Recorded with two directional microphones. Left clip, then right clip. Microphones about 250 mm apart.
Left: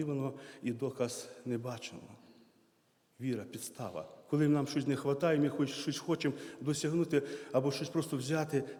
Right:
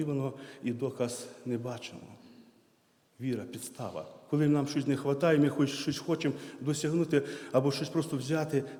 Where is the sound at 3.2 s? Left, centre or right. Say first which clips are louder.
Right 3 dB; centre.